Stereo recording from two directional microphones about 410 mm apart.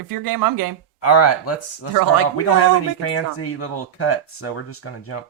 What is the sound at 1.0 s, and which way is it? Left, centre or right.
Speech, left.